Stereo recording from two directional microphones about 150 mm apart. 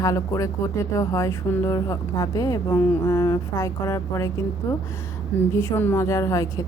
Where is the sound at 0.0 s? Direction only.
20° left (ahead or behind).